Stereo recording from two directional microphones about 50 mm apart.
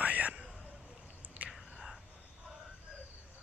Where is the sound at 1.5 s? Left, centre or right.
Centre.